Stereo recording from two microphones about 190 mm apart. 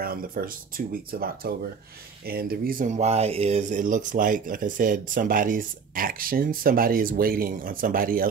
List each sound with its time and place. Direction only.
0.0 s speech: 50° right (ahead or behind)